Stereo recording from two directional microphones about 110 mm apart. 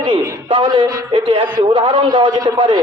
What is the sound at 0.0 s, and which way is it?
A man's voice, 50° right (ahead or behind).